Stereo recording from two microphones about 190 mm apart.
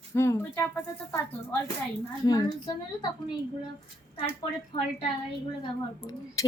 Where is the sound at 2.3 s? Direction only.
20° left (ahead or behind).